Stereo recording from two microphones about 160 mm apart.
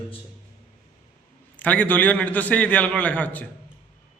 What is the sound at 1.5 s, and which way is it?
A man's voice, 10° left (ahead or behind).